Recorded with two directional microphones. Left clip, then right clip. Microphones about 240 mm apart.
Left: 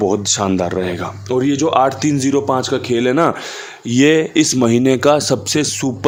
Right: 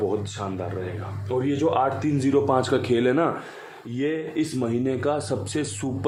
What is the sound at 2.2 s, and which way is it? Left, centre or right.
A man's voice, left.